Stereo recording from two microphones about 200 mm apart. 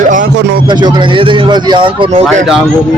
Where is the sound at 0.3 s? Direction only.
60° right (ahead or behind).